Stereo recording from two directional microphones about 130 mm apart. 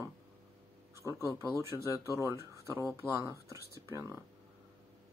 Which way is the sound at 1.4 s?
25° right (ahead or behind).